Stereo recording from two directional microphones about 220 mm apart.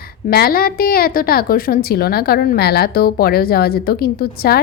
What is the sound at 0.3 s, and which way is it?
A woman's voice, 45° left (ahead or behind).